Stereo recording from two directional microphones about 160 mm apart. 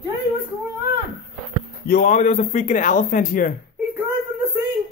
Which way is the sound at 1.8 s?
60° left (ahead or behind).